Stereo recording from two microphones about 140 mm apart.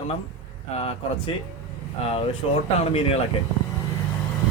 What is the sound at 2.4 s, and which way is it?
Speech, 45° left (ahead or behind).